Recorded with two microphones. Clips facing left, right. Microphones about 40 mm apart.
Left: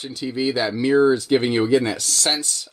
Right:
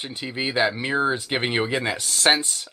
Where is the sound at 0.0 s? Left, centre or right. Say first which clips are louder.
Left 4 dB; right.